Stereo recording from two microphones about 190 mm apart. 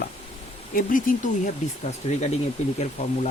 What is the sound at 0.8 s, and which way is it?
Speech, 45° left (ahead or behind).